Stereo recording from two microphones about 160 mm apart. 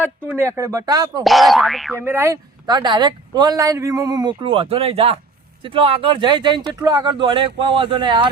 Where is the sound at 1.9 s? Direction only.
15° right (ahead or behind).